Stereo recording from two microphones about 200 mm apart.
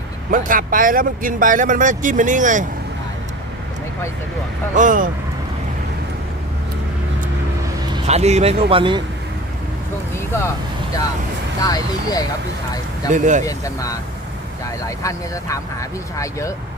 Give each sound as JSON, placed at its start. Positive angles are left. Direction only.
{"t": 0.3, "sound": "speech", "side_deg": -45}
{"t": 4.7, "sound": "speech", "side_deg": -40}
{"t": 7.9, "sound": "speech", "side_deg": -35}
{"t": 11.6, "sound": "speech", "side_deg": 20}
{"t": 13.1, "sound": "speech", "side_deg": -40}
{"t": 13.4, "sound": "speech", "side_deg": 15}